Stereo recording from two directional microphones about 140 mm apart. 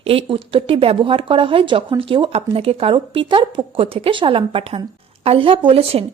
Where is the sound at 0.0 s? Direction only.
45° right (ahead or behind).